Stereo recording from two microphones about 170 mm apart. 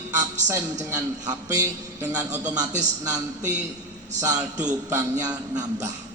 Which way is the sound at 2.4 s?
20° right (ahead or behind).